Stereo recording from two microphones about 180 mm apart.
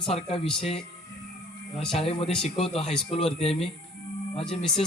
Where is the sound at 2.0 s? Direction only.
35° left (ahead or behind).